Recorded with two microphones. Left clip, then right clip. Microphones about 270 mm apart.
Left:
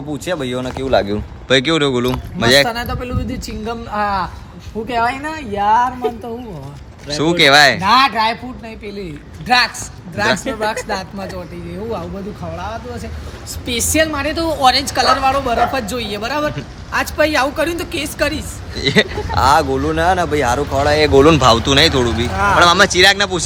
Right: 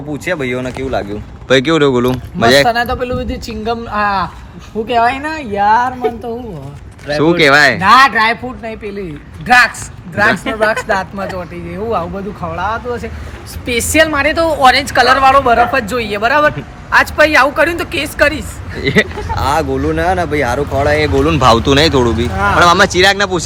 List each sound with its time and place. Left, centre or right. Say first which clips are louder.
0.1 s speech: right 4 dB; centre
0.9 s speech: left 6 dB; left
1.5 s a man's voice: right 4 dB; centre
12.5 s a man's voice: right 11 dB; centre